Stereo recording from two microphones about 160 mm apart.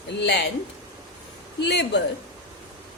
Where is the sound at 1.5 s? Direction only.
90° left.